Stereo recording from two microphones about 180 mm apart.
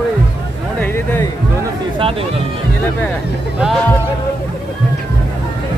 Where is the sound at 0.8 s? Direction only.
10° left (ahead or behind).